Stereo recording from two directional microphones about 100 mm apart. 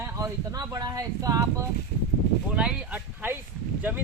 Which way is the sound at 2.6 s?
10° right (ahead or behind).